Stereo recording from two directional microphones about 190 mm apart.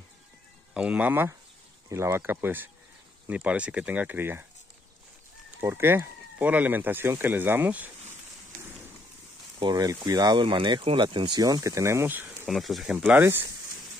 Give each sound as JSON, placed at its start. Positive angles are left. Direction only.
{"t": 0.7, "sound": "speech", "side_deg": -5}
{"t": 5.6, "sound": "speech", "side_deg": -10}
{"t": 9.6, "sound": "speech", "side_deg": -20}